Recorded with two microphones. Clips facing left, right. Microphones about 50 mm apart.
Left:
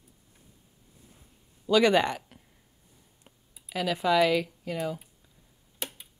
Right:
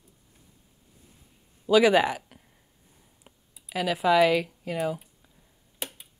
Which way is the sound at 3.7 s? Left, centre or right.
Centre.